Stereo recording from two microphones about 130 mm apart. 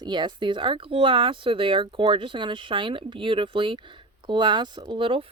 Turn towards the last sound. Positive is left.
turn(degrees=-40)  # may be behind; listen again after turning